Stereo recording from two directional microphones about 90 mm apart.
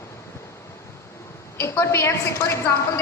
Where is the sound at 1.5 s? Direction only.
30° left (ahead or behind).